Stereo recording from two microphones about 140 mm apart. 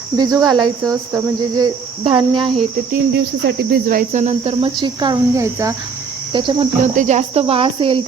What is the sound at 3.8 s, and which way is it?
Speech, 70° right (ahead or behind).